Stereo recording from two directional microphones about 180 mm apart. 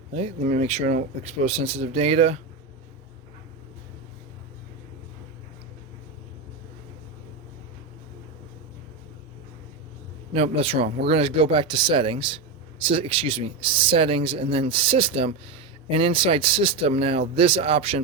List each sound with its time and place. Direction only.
0.1 s speech: 35° right (ahead or behind)
10.3 s speech: 35° right (ahead or behind)